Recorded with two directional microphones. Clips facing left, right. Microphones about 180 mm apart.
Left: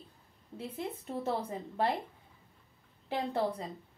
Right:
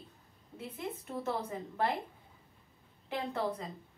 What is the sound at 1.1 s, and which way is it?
Speech, 30° left (ahead or behind).